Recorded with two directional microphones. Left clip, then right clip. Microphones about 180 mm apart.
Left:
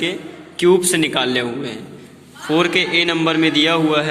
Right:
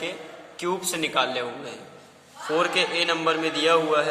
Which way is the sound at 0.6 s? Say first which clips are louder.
Left 12 dB; 10° left (ahead or behind).